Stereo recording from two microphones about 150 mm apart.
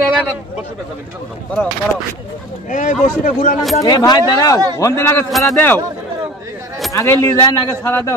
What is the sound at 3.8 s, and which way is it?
A man's voice, 25° left (ahead or behind).